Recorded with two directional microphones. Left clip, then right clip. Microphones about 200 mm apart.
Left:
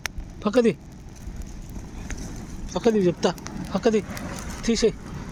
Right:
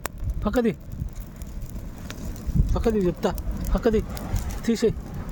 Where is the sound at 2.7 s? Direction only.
Centre (ahead or behind).